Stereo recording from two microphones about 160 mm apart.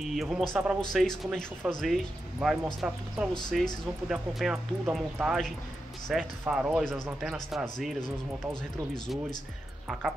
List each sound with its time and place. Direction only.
0.1 s speech: centre (ahead or behind)